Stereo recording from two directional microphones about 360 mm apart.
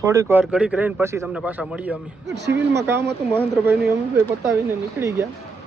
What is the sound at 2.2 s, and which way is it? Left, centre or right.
Speech, right.